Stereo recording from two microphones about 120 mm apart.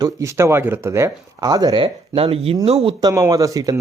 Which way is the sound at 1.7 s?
45° right (ahead or behind).